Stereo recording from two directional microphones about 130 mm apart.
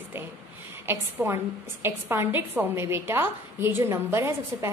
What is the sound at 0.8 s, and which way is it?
A woman's voice, 20° right (ahead or behind).